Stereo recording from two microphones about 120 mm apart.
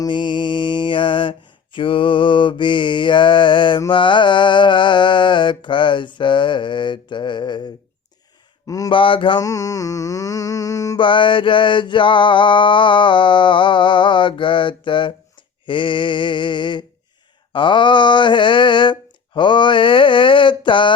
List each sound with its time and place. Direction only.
0.0 s mantra: 40° left (ahead or behind)
8.6 s speech: 30° left (ahead or behind)
8.9 s mantra: 45° left (ahead or behind)
9.4 s a sound: 30° left (ahead or behind)
10.9 s mantra: 45° left (ahead or behind)